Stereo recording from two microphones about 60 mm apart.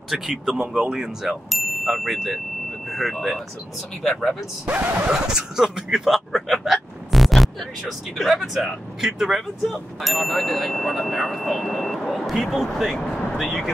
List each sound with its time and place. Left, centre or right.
0.1 s speech: centre
1.3 s chime: centre
2.9 s speech: centre
4.6 s speech: right
5.1 s speech: centre